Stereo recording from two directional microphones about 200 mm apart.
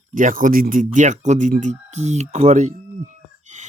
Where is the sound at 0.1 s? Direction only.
40° right (ahead or behind).